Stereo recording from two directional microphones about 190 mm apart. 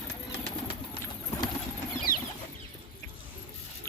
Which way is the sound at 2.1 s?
10° right (ahead or behind).